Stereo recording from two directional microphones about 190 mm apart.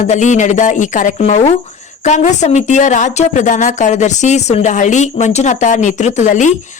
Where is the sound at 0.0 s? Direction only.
40° left (ahead or behind).